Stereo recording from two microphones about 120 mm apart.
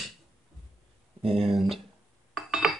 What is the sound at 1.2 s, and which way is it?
Speech, centre (ahead or behind).